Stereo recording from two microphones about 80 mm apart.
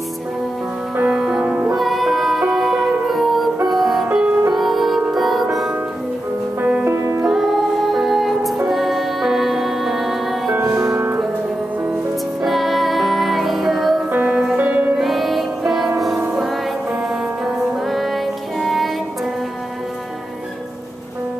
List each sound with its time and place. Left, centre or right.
0.9 s music: right
1.8 s music: centre
6.6 s music: right
7.2 s music: centre
10.5 s music: right
12.4 s music: centre
14.1 s music: centre
15.0 s music: centre
17.9 s music: centre